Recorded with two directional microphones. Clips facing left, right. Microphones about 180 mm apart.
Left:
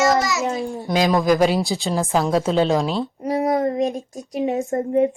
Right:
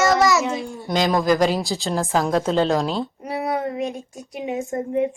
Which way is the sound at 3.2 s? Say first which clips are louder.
Left 8 dB; 40° left (ahead or behind).